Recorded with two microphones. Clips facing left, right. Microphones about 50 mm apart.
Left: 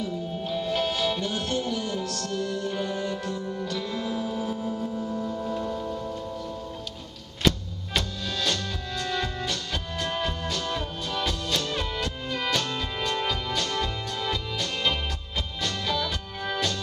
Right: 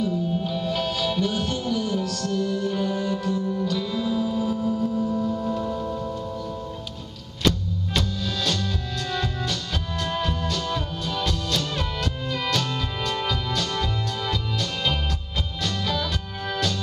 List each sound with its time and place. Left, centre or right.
0.0 s music: centre
4.6 s music: centre
4.9 s singing bowl: centre
5.3 s music: centre
7.4 s music: centre